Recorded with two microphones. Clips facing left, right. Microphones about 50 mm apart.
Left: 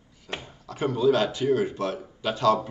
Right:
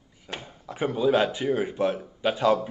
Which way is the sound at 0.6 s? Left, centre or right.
Centre.